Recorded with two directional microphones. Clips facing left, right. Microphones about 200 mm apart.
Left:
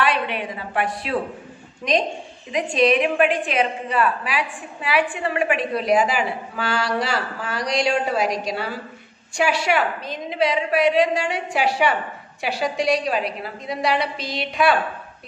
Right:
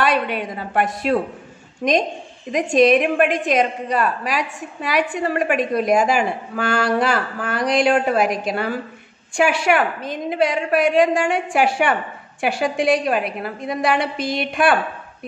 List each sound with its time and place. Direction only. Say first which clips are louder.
0.0 s a woman's voice: right 3 dB; 40° right (ahead or behind)
2.5 s a woman's voice: right 4 dB; 45° right (ahead or behind)